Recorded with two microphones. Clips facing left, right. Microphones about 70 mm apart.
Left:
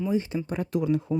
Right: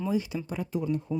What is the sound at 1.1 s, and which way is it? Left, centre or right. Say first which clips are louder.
Speech: left 4 dB; left.